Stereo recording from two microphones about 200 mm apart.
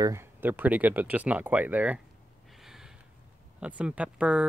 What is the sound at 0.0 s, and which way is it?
Speech, 15° right (ahead or behind).